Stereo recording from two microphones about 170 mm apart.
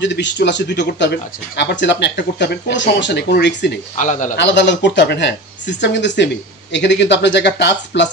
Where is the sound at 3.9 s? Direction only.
45° left (ahead or behind).